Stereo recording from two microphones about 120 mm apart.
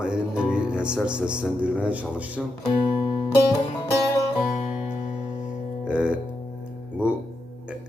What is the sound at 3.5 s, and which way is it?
Music, 25° left (ahead or behind).